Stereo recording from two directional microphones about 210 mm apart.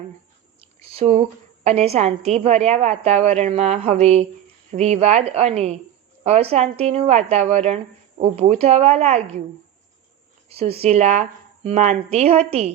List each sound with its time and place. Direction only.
0.6 s a sound: 30° right (ahead or behind)
1.6 s a woman's voice: 30° right (ahead or behind)
10.8 s a woman's voice: 30° right (ahead or behind)